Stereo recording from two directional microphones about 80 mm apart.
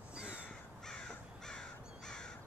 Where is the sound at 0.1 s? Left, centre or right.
Centre.